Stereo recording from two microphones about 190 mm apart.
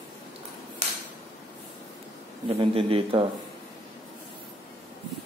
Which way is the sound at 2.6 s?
30° right (ahead or behind).